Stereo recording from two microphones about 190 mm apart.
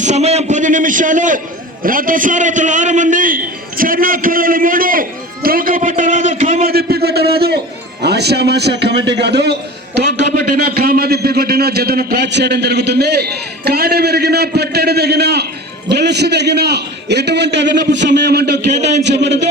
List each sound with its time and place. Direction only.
0.0 s a man's voice: 35° right (ahead or behind)
6.7 s a sound: 55° right (ahead or behind)
8.0 s a man's voice: 60° right (ahead or behind)
10.2 s a man's voice: 45° right (ahead or behind); by 19.4 s 65° right (ahead or behind)